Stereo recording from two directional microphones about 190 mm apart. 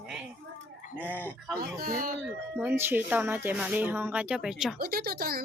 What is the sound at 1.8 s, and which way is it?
Speech, 50° right (ahead or behind).